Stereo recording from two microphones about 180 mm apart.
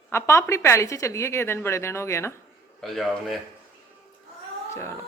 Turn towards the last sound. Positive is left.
turn(degrees=0)  # may be behind; listen again after turning